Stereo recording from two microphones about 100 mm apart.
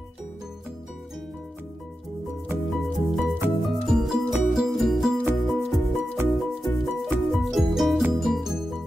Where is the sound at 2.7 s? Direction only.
Centre (ahead or behind).